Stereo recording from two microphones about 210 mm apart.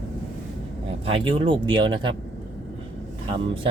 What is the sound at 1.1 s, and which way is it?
Speech, 25° right (ahead or behind).